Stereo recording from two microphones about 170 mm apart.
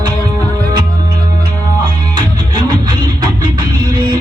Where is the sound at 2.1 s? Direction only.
25° right (ahead or behind).